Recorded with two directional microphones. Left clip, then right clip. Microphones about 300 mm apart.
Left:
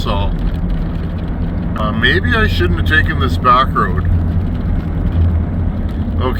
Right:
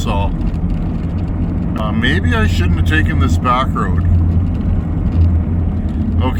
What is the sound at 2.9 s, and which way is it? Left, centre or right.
Speech, centre.